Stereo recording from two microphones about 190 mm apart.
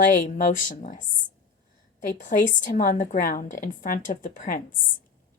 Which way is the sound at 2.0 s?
40° left (ahead or behind).